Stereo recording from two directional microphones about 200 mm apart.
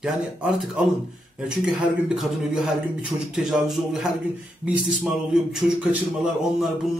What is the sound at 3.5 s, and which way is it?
Speech, centre (ahead or behind).